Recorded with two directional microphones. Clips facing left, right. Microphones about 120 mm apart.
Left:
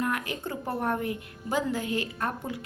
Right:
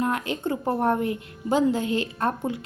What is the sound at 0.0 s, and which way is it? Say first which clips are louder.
A woman's voice: right 5 dB; 25° right (ahead or behind).